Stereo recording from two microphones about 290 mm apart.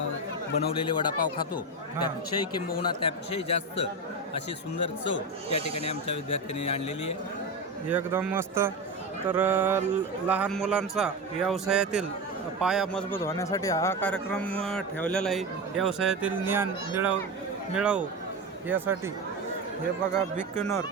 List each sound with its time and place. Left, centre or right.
0.5 s speech: centre
2.8 s speech: centre
4.4 s speech: left
7.9 s a man's voice: centre
20.6 s speech: centre